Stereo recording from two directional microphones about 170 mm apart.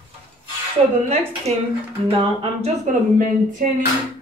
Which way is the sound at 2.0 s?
35° right (ahead or behind).